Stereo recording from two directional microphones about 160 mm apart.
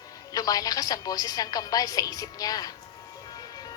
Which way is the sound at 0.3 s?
25° left (ahead or behind).